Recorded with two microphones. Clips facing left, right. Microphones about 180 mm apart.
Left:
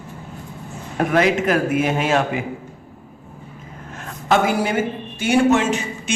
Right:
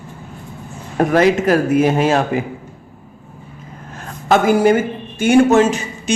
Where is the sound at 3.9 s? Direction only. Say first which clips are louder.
Right 3 dB; 45° right (ahead or behind).